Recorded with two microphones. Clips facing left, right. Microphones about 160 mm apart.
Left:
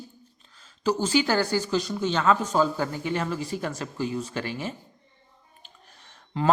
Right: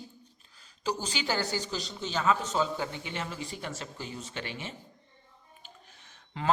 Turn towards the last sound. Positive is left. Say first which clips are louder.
# left 10 dB
turn(degrees=45)  # may be behind; listen again after turning